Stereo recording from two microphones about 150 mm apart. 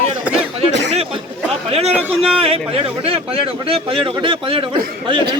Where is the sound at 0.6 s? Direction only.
40° right (ahead or behind).